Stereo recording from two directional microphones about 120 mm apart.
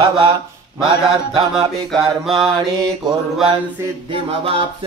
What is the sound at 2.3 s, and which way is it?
Mantra, 45° right (ahead or behind).